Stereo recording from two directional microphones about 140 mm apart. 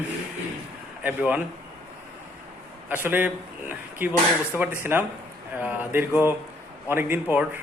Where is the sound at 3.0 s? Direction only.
15° right (ahead or behind).